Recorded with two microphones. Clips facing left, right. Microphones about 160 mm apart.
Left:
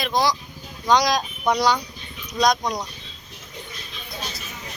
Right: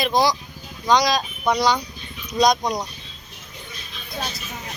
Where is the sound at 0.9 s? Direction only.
10° left (ahead or behind).